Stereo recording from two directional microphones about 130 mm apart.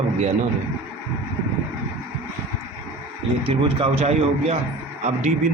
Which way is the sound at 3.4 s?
45° right (ahead or behind).